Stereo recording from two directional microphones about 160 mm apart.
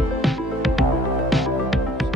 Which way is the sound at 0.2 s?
Centre (ahead or behind).